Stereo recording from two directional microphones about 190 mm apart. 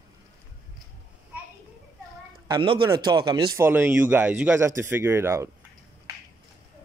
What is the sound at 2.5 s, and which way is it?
A man's voice, 25° right (ahead or behind).